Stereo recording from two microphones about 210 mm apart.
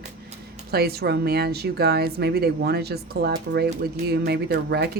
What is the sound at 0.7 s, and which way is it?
Speech, 50° right (ahead or behind).